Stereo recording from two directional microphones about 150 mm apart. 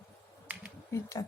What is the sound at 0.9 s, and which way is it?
Speech, 20° left (ahead or behind).